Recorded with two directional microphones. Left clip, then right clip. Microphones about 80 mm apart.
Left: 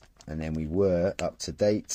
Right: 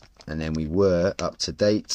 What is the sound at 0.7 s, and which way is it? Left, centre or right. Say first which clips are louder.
Speech: right 4 dB; centre.